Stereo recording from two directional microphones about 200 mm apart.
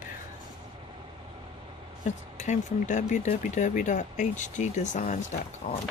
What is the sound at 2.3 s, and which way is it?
Speech, 35° left (ahead or behind).